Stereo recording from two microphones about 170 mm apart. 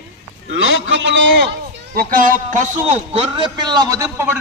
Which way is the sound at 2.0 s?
55° right (ahead or behind).